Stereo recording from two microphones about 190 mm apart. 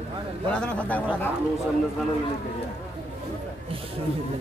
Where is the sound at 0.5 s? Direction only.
5° left (ahead or behind).